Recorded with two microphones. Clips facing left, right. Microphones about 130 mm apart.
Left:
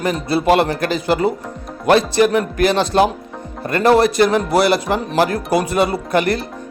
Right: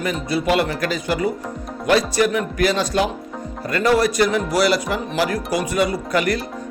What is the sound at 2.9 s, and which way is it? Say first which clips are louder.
Speech: left 8 dB; 40° left (ahead or behind).